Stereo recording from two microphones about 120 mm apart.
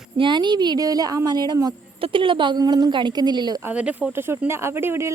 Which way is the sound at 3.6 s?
10° right (ahead or behind).